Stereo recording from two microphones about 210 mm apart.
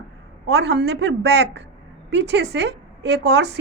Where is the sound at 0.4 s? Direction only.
55° right (ahead or behind).